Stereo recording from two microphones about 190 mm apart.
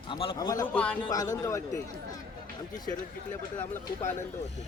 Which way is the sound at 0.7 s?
5° left (ahead or behind).